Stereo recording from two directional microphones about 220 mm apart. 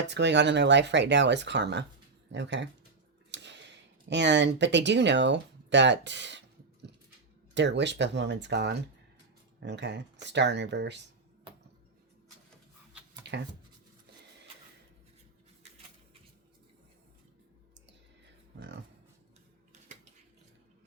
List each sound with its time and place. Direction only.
0.1 s speech: 50° right (ahead or behind)
7.5 s speech: 55° right (ahead or behind)
13.2 s a sound: 50° right (ahead or behind)